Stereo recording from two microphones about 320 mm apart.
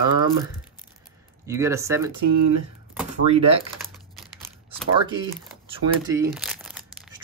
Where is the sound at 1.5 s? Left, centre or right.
Centre.